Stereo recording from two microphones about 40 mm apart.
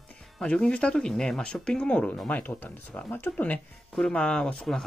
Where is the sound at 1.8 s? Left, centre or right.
Left.